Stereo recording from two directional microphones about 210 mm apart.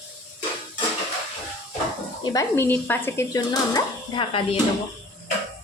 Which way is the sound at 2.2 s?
15° left (ahead or behind).